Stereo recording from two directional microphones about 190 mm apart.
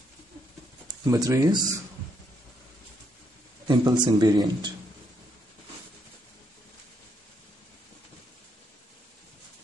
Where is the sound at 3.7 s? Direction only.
20° right (ahead or behind).